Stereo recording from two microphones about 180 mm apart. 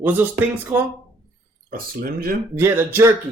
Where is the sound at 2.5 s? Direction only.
15° right (ahead or behind).